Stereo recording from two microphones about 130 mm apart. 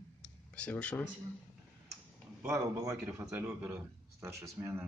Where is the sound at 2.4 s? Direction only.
25° right (ahead or behind).